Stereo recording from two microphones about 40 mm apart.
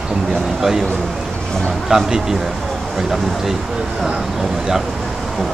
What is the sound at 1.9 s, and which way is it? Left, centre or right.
Speech, centre.